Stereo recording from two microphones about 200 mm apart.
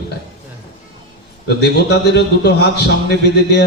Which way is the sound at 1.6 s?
55° left (ahead or behind).